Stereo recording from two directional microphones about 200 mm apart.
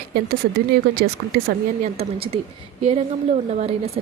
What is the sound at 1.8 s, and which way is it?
A woman's voice, 30° right (ahead or behind).